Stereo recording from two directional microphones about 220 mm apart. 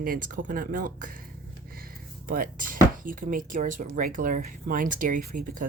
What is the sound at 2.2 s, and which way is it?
Speech, 40° right (ahead or behind).